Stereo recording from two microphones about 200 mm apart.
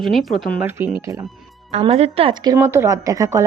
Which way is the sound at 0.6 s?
10° right (ahead or behind).